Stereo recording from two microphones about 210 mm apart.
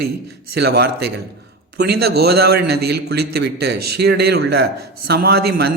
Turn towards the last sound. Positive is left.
turn(degrees=-50)  # may be behind; listen again after turning